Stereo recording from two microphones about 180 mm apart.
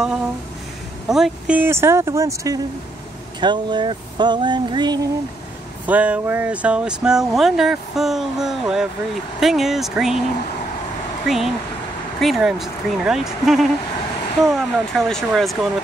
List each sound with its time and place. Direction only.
1.0 s speech: 5° right (ahead or behind); by 5.1 s 25° right (ahead or behind)
5.9 s speech: 10° right (ahead or behind)
11.2 s speech: centre (ahead or behind)